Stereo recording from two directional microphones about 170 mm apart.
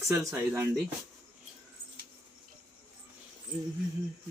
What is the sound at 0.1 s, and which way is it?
Speech, 15° right (ahead or behind).